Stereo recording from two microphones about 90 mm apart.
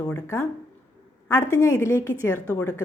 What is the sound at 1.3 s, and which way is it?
A woman's voice, 35° left (ahead or behind).